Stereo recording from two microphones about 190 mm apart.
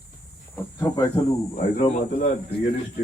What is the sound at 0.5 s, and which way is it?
Speech, 15° left (ahead or behind).